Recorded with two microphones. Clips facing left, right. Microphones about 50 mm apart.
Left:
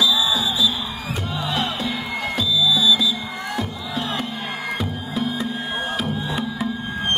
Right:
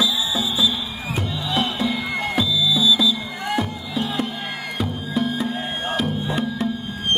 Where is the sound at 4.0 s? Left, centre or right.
Left.